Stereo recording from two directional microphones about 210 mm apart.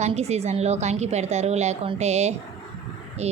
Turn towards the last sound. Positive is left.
turn(degrees=-30)  # may be behind; listen again after turning